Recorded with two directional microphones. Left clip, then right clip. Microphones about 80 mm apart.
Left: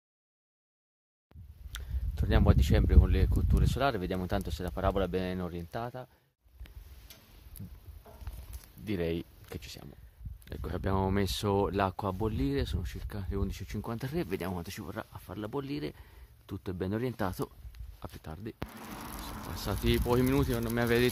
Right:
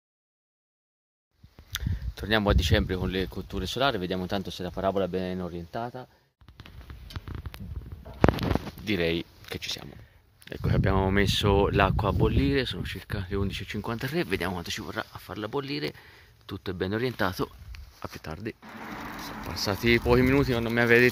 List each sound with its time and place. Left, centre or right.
1.8 s speech: centre
3.6 s speech: left
8.8 s speech: centre
18.2 s speech: centre
18.7 s a sound: right
19.4 s speech: centre